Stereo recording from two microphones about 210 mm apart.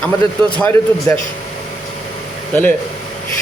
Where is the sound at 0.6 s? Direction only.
10° left (ahead or behind).